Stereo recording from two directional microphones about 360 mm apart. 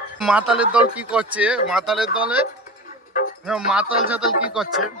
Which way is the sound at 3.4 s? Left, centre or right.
Centre.